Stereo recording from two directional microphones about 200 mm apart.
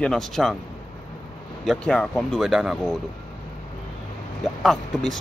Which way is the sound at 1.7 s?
5° left (ahead or behind).